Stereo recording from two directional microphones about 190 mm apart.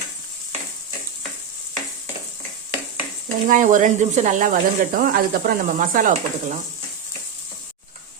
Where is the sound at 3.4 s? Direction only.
45° right (ahead or behind).